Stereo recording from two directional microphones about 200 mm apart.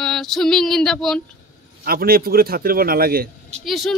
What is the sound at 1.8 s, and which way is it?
A man's voice, 50° right (ahead or behind).